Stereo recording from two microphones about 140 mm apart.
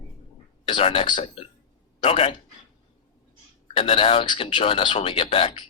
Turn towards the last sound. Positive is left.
turn(degrees=40)  # may be behind; listen again after turning